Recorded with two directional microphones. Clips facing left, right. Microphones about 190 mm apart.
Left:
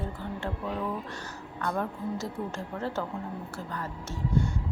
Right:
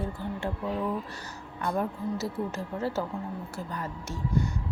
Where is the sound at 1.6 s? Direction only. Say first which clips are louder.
Right 2 dB; 15° right (ahead or behind).